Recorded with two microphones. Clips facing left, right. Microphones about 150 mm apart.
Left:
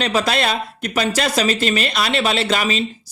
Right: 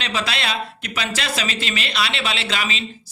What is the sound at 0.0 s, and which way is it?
Speech, 45° left (ahead or behind).